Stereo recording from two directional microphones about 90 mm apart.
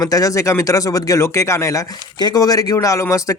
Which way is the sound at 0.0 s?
40° left (ahead or behind).